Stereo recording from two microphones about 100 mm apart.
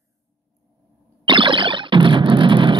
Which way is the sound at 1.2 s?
55° right (ahead or behind).